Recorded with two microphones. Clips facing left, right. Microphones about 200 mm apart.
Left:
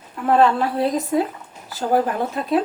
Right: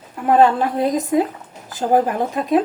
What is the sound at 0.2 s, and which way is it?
A woman's voice, 15° right (ahead or behind).